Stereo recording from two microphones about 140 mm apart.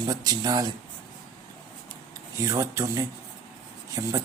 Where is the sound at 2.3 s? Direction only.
20° right (ahead or behind).